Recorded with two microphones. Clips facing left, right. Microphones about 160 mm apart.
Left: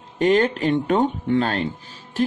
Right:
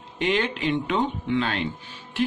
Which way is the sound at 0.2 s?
45° left (ahead or behind).